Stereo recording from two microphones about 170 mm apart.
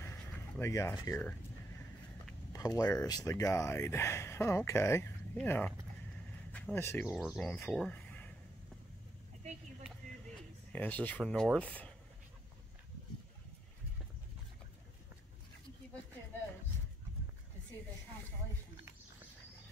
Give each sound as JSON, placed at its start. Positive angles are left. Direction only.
{"t": 0.0, "sound": "a sound", "side_deg": 15}
{"t": 2.5, "sound": "speech", "side_deg": 20}
{"t": 10.7, "sound": "speech", "side_deg": 10}